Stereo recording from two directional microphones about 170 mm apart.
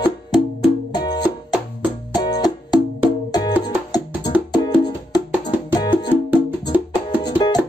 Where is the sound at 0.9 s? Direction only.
25° left (ahead or behind).